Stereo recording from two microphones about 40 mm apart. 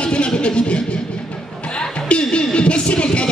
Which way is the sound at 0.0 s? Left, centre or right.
Left.